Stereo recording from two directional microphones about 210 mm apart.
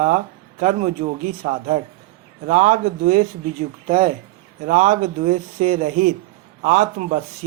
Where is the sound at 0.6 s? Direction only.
35° right (ahead or behind).